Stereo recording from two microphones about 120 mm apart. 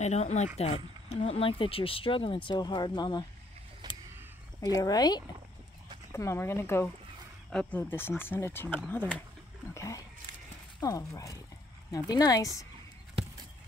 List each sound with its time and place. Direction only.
0.0 s speech: 70° left (ahead or behind); by 3.3 s 35° left (ahead or behind)
3.8 s a sound: 35° right (ahead or behind)
4.6 s speech: 30° left (ahead or behind)
6.1 s speech: 20° left (ahead or behind)
9.8 s speech: 25° left (ahead or behind)